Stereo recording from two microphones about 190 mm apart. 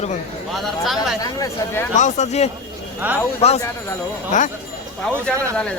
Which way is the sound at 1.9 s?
40° left (ahead or behind).